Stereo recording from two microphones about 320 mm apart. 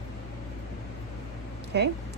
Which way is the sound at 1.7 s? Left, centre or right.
Right.